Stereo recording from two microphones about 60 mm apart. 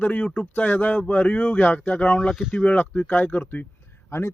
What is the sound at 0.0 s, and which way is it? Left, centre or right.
Speech, left.